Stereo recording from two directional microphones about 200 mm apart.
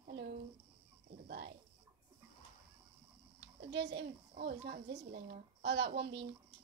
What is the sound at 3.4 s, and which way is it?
A child's voice, 60° right (ahead or behind).